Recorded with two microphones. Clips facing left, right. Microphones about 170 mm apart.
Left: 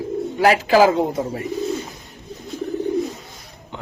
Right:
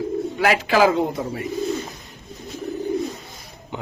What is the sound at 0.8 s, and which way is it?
Speech, 20° left (ahead or behind).